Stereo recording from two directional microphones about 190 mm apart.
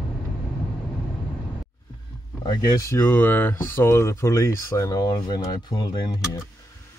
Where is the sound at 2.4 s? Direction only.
20° left (ahead or behind).